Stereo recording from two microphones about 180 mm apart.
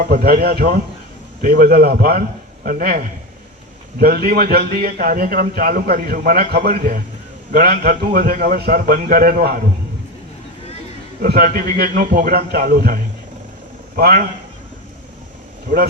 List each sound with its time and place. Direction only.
0.0 s a man's voice: 55° right (ahead or behind)
11.2 s a man's voice: 55° right (ahead or behind)